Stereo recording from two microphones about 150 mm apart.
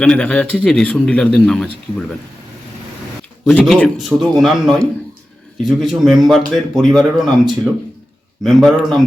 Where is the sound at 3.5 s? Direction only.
Centre (ahead or behind).